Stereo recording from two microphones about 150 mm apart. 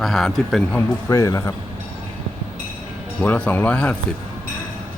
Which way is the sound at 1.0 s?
20° left (ahead or behind).